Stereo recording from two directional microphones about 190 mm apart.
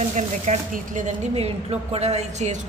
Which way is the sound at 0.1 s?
40° right (ahead or behind).